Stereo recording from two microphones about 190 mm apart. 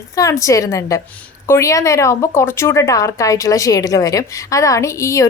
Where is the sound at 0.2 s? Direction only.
15° left (ahead or behind).